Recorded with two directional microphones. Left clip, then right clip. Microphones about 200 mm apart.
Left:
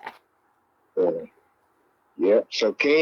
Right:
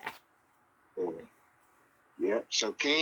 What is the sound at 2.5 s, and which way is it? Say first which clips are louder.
Speech: left 9 dB; 10° left (ahead or behind).